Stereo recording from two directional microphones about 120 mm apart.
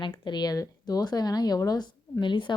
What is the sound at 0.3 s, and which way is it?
A woman's voice, 35° left (ahead or behind).